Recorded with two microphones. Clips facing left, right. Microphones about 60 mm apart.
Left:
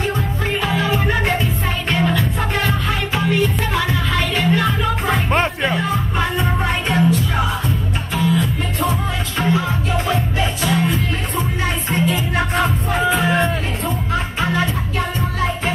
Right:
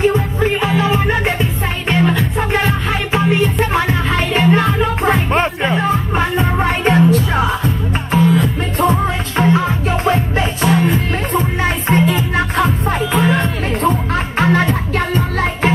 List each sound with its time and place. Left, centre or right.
0.0 s music: right
5.3 s music: centre
5.8 s music: right
13.8 s music: right